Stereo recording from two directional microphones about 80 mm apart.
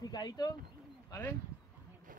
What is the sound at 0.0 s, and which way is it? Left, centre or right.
Speech, left.